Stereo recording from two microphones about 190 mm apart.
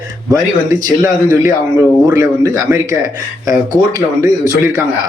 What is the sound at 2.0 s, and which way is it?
Speech, 15° right (ahead or behind).